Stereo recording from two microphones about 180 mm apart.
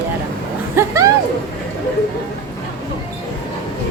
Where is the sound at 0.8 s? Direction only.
20° right (ahead or behind).